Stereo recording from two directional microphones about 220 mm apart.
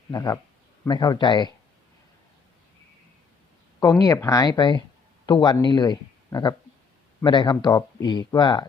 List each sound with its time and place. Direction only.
0.1 s speech: 15° left (ahead or behind)
3.8 s speech: 15° left (ahead or behind)